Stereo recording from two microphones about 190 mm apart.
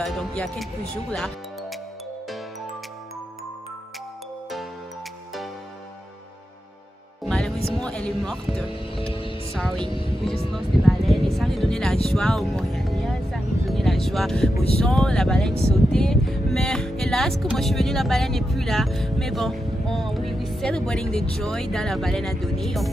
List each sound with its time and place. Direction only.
0.0 s speech: 5° left (ahead or behind)
1.1 s music: 5° left (ahead or behind)
7.2 s music: 5° left (ahead or behind)
7.8 s speech: 5° left (ahead or behind)
8.9 s speech: 30° left (ahead or behind)
9.6 s speech: 5° left (ahead or behind)
9.8 s speech: 30° left (ahead or behind)
10.5 s speech: centre (ahead or behind)